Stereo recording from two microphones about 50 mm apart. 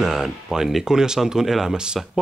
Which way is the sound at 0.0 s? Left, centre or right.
Centre.